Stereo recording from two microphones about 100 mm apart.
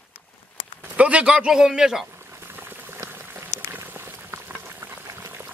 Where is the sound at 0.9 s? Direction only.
10° right (ahead or behind).